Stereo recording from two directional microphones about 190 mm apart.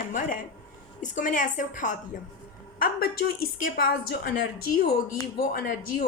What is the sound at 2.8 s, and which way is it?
A woman's voice, 55° left (ahead or behind).